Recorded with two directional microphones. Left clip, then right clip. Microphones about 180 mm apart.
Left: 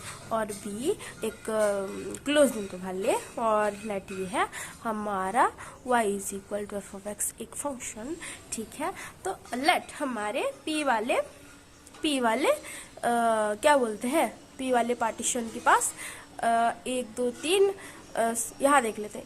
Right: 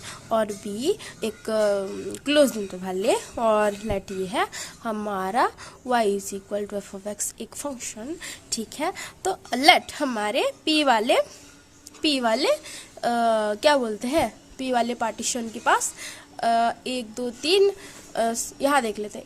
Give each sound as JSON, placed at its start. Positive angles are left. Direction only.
{"t": 0.0, "sound": "speech", "side_deg": -45}
{"t": 7.8, "sound": "a woman's voice", "side_deg": -45}